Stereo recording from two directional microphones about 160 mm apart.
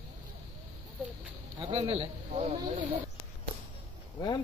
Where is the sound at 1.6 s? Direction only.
35° right (ahead or behind).